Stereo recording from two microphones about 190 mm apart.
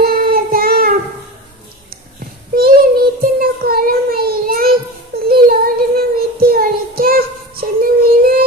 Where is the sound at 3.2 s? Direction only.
50° right (ahead or behind).